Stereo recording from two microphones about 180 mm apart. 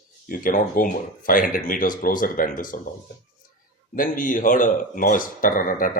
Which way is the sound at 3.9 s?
50° left (ahead or behind).